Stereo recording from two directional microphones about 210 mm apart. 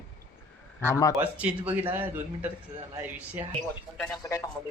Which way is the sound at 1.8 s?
10° right (ahead or behind).